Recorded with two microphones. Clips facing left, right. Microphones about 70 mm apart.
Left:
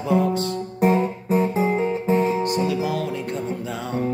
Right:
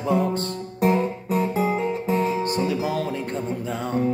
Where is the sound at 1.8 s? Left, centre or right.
Left.